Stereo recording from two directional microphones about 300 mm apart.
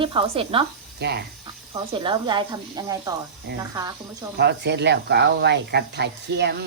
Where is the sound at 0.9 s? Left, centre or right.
Right.